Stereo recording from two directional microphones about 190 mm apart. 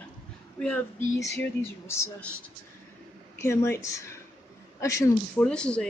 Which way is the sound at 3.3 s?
15° left (ahead or behind).